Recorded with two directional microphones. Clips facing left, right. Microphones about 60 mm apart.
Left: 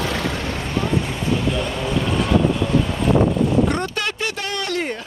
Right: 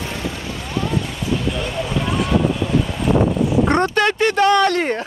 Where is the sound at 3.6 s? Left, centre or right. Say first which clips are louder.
Right 6 dB; right.